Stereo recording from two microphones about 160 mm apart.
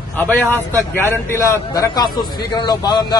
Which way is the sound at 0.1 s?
10° left (ahead or behind).